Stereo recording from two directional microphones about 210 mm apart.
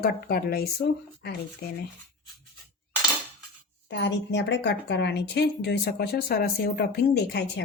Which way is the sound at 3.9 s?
55° left (ahead or behind).